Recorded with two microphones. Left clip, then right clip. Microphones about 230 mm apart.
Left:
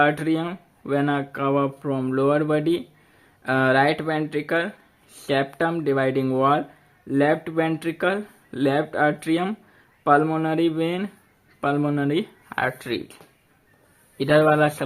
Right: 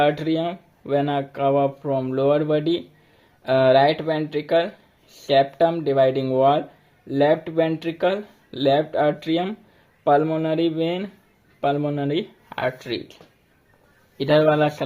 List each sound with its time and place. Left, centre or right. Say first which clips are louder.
0.0 s speech: right 1 dB; centre
14.2 s speech: even; centre